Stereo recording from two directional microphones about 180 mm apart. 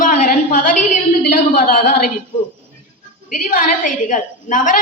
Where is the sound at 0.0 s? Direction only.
45° left (ahead or behind).